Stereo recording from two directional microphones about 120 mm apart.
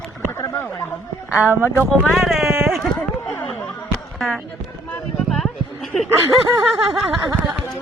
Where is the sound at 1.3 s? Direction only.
15° right (ahead or behind).